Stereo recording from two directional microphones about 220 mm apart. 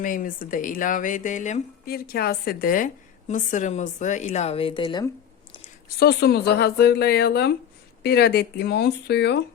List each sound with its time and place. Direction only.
0.0 s speech: 40° left (ahead or behind); by 5.0 s 20° left (ahead or behind)
6.0 s speech: 45° left (ahead or behind)